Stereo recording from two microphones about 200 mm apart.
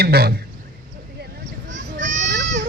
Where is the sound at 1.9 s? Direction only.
40° right (ahead or behind).